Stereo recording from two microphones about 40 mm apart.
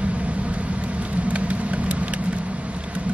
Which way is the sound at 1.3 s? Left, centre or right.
Right.